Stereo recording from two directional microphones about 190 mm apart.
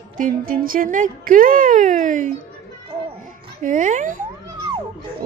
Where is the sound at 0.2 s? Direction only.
45° right (ahead or behind).